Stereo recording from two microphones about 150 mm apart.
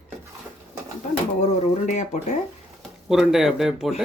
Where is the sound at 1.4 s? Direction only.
55° left (ahead or behind).